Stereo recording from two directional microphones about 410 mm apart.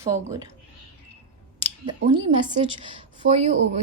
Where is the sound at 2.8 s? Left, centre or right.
Centre.